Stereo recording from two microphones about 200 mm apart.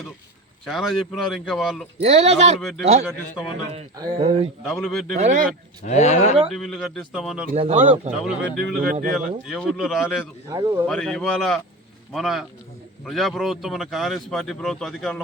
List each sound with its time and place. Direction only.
0.6 s speech: centre (ahead or behind)
2.0 s speech: 30° right (ahead or behind)
2.6 s speech: centre (ahead or behind)
4.2 s speech: 30° right (ahead or behind)
4.6 s speech: centre (ahead or behind)
5.1 s speech: 35° right (ahead or behind)
5.8 s speech: 35° left (ahead or behind)
6.4 s speech: centre (ahead or behind)
7.5 s speech: 35° right (ahead or behind)
8.2 s speech: 5° right (ahead or behind)
8.9 s speech: 40° right (ahead or behind)
9.5 s speech: centre (ahead or behind)
10.5 s speech: 20° right (ahead or behind)
10.8 s speech: 5° left (ahead or behind)